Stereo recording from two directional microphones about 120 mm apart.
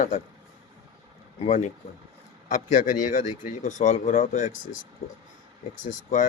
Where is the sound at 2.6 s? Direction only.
90° left.